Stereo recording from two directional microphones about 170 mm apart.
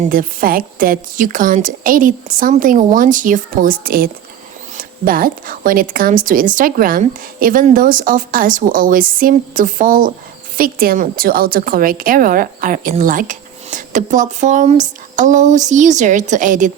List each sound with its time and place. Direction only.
0.0 s a woman's voice: 55° right (ahead or behind)